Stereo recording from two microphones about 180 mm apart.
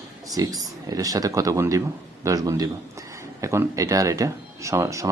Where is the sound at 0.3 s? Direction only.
20° right (ahead or behind).